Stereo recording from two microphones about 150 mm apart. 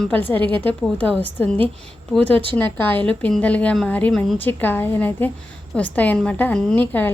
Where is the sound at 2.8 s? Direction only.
10° left (ahead or behind).